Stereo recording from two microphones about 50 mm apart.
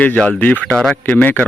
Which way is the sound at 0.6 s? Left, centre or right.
Centre.